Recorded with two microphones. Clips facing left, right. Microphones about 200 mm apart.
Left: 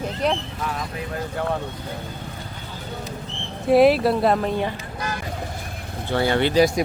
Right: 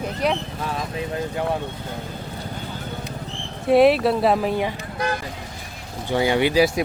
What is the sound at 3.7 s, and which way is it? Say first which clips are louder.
Speech: even; centre (ahead or behind).